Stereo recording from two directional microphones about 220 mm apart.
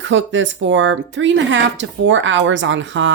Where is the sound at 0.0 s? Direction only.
55° right (ahead or behind).